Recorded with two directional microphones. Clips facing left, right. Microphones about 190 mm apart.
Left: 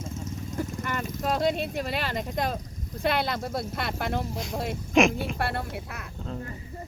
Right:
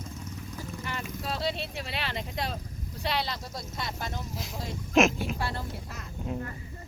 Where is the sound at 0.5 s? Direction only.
50° left (ahead or behind).